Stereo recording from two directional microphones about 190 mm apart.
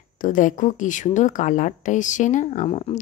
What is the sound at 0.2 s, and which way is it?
Speech, 45° left (ahead or behind).